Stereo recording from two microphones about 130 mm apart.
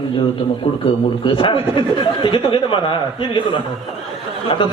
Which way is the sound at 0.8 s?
40° left (ahead or behind).